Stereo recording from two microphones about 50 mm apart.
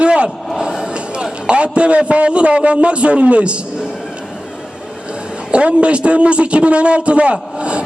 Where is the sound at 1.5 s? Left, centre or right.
Right.